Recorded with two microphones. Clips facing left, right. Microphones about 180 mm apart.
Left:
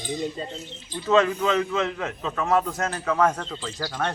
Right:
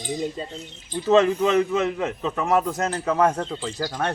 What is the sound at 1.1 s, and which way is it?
A man's voice, 35° right (ahead or behind).